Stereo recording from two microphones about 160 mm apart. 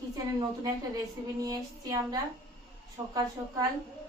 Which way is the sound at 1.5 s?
25° right (ahead or behind).